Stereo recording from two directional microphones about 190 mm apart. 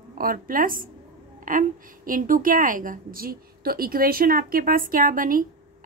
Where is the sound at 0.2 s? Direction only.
50° right (ahead or behind).